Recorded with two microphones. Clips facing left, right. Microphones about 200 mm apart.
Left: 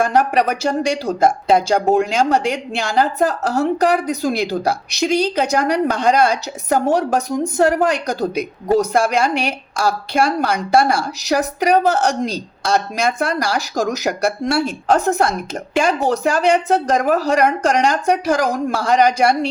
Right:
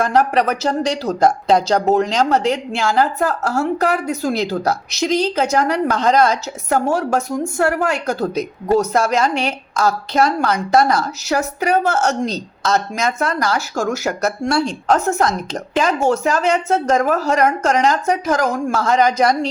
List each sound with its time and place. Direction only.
0.0 s speech: 15° left (ahead or behind)